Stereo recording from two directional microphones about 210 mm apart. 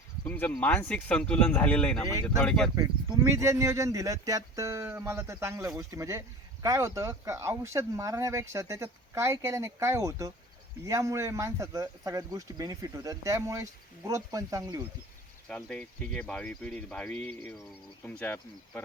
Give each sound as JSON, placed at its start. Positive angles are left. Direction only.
{"t": 0.3, "sound": "speech", "side_deg": 10}
{"t": 3.2, "sound": "speech", "side_deg": -15}
{"t": 15.4, "sound": "speech", "side_deg": 5}